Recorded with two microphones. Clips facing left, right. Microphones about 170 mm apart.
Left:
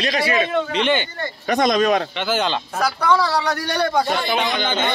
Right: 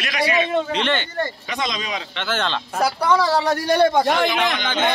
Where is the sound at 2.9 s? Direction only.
15° right (ahead or behind).